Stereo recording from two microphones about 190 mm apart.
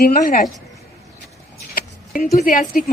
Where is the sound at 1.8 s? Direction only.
50° left (ahead or behind).